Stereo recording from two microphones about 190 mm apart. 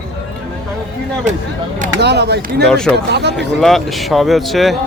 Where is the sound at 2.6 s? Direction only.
5° left (ahead or behind).